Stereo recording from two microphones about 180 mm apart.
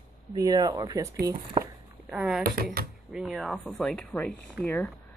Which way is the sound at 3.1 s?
Centre (ahead or behind).